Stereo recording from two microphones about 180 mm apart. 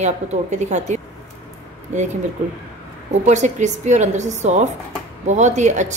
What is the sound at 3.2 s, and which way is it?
Speech, 40° right (ahead or behind).